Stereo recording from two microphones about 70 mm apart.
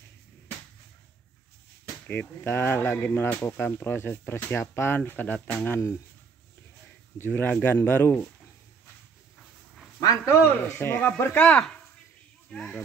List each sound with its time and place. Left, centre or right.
2.0 s speech: left
7.2 s speech: left
10.2 s speech: left
11.3 s speech: centre